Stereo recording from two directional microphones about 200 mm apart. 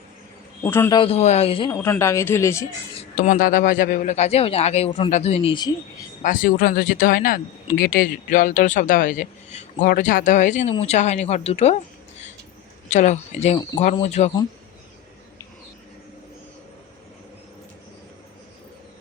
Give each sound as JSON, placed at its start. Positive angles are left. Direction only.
{"t": 0.6, "sound": "speech", "side_deg": 10}
{"t": 0.9, "sound": "speech", "side_deg": 30}
{"t": 1.7, "sound": "speech", "side_deg": 10}
{"t": 3.0, "sound": "speech", "side_deg": 40}
{"t": 6.2, "sound": "speech", "side_deg": 45}
{"t": 12.9, "sound": "speech", "side_deg": 35}